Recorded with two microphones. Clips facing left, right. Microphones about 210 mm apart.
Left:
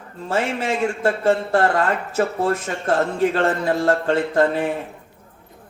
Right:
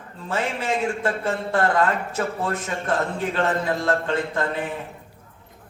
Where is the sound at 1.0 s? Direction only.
40° left (ahead or behind).